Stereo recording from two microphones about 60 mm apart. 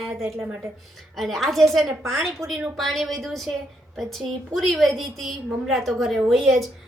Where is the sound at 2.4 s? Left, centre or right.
Right.